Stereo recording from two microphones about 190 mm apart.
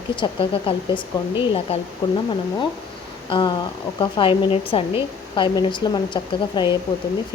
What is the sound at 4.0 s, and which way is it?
A woman's voice, 25° left (ahead or behind).